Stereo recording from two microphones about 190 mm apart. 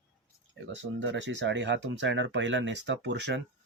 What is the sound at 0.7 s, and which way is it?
Speech, 70° right (ahead or behind).